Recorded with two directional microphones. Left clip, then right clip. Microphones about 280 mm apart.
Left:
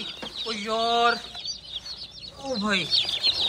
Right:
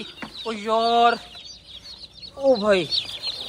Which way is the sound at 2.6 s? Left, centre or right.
Centre.